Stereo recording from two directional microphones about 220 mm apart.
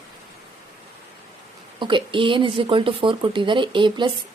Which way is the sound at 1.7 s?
20° right (ahead or behind).